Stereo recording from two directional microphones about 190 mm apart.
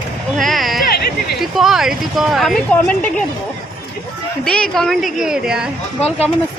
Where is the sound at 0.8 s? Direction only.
55° left (ahead or behind).